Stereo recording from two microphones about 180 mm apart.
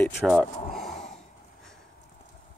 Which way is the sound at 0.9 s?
40° left (ahead or behind).